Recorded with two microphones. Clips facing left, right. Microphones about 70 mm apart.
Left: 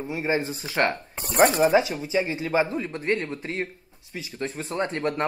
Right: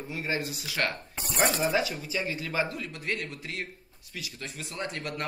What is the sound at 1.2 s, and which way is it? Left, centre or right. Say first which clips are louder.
Speech: left 8 dB; left.